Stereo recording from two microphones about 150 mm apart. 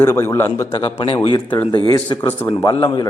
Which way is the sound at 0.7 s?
40° left (ahead or behind).